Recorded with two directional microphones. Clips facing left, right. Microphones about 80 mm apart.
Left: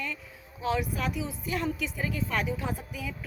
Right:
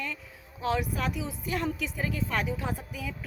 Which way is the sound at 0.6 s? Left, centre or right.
Right.